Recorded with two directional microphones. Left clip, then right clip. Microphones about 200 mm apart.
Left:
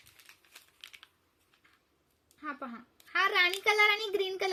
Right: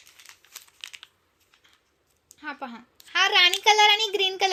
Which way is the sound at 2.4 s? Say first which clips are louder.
Right 5 dB; 15° left (ahead or behind).